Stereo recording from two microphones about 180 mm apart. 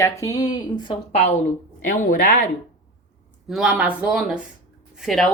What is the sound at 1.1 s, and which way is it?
Speech, 40° left (ahead or behind).